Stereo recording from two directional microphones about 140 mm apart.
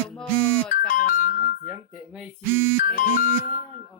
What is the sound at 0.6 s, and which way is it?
Music, 70° left (ahead or behind).